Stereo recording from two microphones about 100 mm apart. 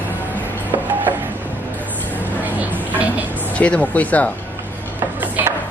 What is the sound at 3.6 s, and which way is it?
Speech, 15° left (ahead or behind).